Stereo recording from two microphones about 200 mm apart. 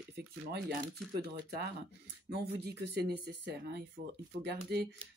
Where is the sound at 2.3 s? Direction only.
55° right (ahead or behind).